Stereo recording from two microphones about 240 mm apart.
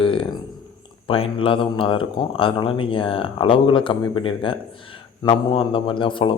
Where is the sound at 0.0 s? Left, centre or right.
Left.